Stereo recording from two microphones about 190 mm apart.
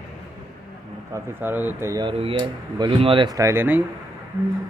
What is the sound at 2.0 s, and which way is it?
Speech, 30° right (ahead or behind).